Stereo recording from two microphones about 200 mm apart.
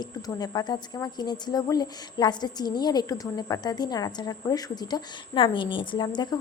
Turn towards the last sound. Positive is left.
turn(degrees=20)  # may be behind; listen again after turning